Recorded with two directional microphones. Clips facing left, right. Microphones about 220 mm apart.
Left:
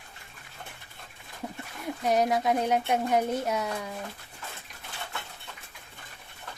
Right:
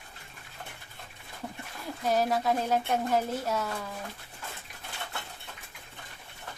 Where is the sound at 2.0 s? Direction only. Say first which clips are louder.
Left 2 dB; 20° left (ahead or behind).